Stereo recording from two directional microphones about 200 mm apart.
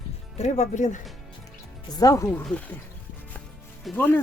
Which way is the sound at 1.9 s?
15° left (ahead or behind).